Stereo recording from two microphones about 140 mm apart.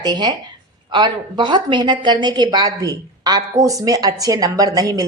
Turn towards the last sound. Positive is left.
turn(degrees=-25)  # may be behind; listen again after turning